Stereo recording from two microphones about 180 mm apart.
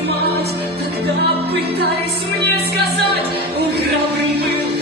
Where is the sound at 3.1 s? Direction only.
65° right (ahead or behind).